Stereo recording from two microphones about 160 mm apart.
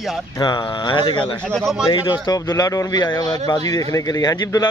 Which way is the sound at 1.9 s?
25° left (ahead or behind).